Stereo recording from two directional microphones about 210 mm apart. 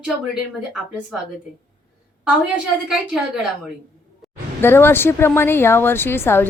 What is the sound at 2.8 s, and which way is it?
Speech, centre (ahead or behind).